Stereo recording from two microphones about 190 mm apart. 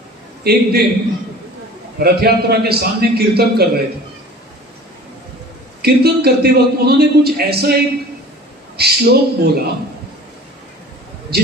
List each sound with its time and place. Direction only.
0.4 s a man's voice: 55° right (ahead or behind)
2.0 s a man's voice: 55° right (ahead or behind)
5.8 s a man's voice: 55° right (ahead or behind)
11.3 s a man's voice: 55° right (ahead or behind)